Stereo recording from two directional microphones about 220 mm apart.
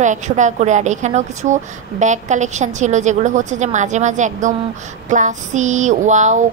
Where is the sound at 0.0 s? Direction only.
35° right (ahead or behind).